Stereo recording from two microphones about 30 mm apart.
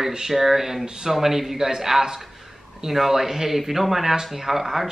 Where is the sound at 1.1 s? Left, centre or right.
Centre.